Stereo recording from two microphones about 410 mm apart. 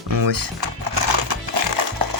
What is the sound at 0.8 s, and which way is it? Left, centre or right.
Horse, right.